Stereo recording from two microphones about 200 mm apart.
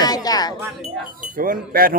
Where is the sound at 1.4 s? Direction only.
45° right (ahead or behind).